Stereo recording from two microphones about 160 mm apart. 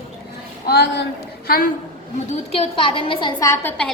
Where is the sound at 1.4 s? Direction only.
70° left (ahead or behind).